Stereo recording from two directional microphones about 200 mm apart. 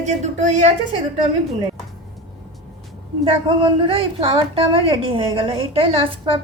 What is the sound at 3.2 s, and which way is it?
A woman's voice, 25° right (ahead or behind).